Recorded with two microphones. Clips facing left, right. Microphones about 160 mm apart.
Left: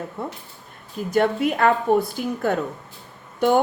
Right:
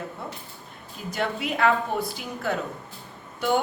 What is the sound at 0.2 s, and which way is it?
A woman's voice, 50° left (ahead or behind).